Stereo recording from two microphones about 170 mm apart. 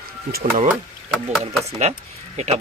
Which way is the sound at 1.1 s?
Centre (ahead or behind).